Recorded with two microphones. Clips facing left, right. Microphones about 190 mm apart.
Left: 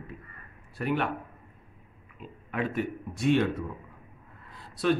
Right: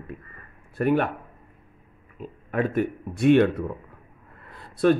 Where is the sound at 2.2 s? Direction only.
45° right (ahead or behind).